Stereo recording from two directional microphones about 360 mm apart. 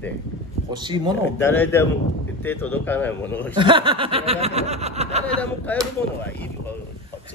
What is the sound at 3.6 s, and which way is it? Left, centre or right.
Snicker, centre.